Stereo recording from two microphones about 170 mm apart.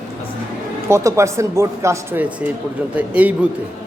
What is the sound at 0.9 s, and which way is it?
Speech, 15° right (ahead or behind).